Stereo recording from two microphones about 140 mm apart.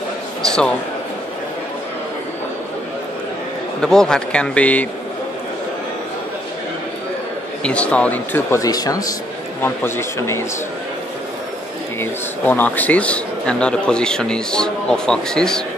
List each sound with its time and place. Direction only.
0.5 s speech: 5° left (ahead or behind)
3.8 s speech: 5° left (ahead or behind)
7.6 s speech: 10° left (ahead or behind)
8.5 s speech: 25° left (ahead or behind)
12.0 s speech: 15° left (ahead or behind)